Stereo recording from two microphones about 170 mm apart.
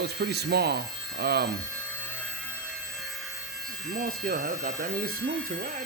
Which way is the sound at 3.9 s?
55° right (ahead or behind).